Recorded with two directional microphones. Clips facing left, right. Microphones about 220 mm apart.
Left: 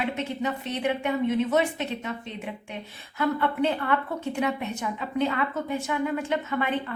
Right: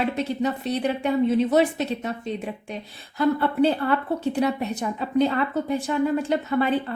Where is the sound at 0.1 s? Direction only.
35° right (ahead or behind).